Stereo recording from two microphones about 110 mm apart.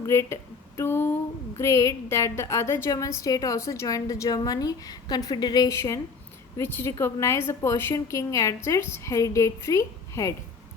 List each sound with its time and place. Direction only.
0.1 s a woman's voice: 25° left (ahead or behind)